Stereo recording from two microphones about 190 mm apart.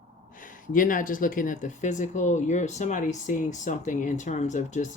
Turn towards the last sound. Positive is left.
turn(degrees=40)  # may be behind; listen again after turning